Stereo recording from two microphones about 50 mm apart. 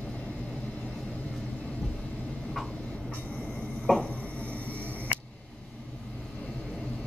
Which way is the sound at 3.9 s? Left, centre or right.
Centre.